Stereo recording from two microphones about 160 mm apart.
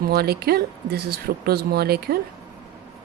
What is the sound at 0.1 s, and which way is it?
Speech, 75° right (ahead or behind).